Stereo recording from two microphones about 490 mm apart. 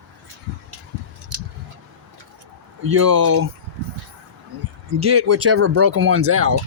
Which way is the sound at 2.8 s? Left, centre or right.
Right.